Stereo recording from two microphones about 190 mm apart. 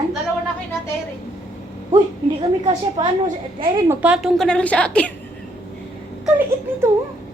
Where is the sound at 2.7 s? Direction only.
25° right (ahead or behind).